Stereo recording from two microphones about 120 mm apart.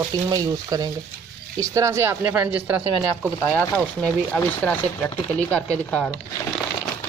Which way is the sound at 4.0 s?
10° left (ahead or behind).